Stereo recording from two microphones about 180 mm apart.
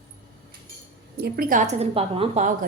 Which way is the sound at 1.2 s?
55° right (ahead or behind).